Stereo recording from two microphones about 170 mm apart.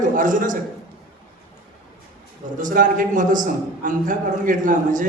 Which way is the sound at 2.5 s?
50° right (ahead or behind).